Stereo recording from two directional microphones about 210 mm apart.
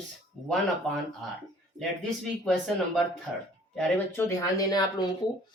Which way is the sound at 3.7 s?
10° left (ahead or behind).